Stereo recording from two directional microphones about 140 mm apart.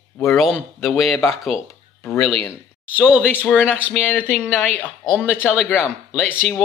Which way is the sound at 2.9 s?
10° right (ahead or behind).